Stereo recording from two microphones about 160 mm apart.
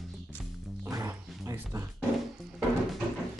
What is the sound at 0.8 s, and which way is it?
Music, 15° right (ahead or behind).